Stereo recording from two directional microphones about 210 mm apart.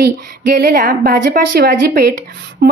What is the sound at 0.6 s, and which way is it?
A woman's voice, 50° right (ahead or behind).